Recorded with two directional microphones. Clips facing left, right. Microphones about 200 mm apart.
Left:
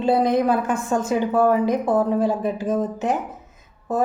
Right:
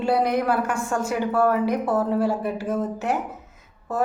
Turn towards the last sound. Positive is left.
turn(degrees=15)  # may be behind; listen again after turning